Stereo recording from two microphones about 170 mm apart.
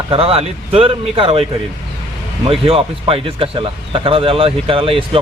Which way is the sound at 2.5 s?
35° right (ahead or behind).